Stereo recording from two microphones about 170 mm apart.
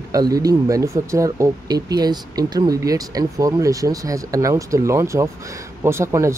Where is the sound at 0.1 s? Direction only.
20° right (ahead or behind).